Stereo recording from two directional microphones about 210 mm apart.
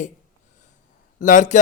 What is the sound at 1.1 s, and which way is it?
Speech, 35° left (ahead or behind).